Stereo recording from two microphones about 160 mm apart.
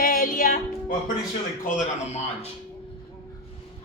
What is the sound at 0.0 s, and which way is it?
Music, 60° left (ahead or behind).